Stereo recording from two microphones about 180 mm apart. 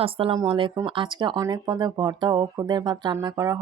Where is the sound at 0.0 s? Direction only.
30° right (ahead or behind).